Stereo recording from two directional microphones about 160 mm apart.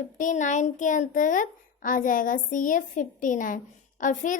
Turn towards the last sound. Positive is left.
turn(degrees=50)  # may be behind; listen again after turning